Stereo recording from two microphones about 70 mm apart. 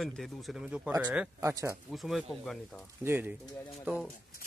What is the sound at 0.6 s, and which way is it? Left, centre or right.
Speech, centre.